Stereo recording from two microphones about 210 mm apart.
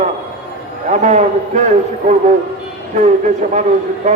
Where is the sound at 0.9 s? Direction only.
35° right (ahead or behind).